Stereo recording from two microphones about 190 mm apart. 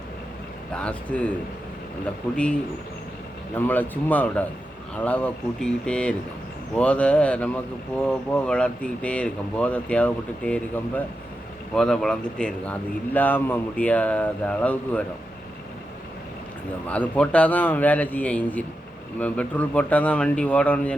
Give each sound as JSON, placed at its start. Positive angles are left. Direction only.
{"t": 0.7, "sound": "speech", "side_deg": 5}
{"t": 3.5, "sound": "speech", "side_deg": 10}
{"t": 16.9, "sound": "speech", "side_deg": 5}